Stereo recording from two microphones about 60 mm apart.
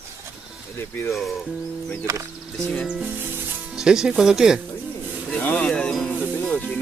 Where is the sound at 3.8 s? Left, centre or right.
Centre.